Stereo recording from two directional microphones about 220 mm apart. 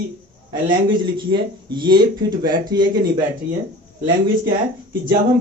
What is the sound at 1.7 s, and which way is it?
Speech, 20° right (ahead or behind).